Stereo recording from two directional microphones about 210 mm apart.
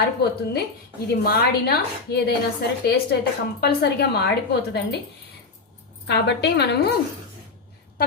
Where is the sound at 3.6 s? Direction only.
50° left (ahead or behind).